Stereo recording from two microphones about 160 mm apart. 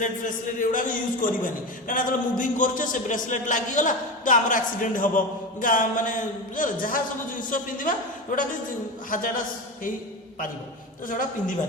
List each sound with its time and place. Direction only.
0.0 s a man's voice: 55° left (ahead or behind)
11.1 s a man's voice: 55° left (ahead or behind)